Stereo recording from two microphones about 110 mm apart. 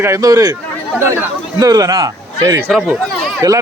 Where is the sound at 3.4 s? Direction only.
35° right (ahead or behind).